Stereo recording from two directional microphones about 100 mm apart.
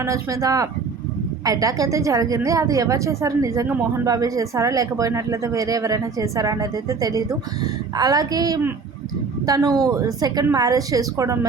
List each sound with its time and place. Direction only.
0.0 s speech: 30° right (ahead or behind)